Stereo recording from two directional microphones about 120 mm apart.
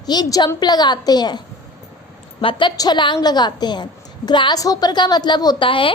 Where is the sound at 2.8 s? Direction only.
40° left (ahead or behind).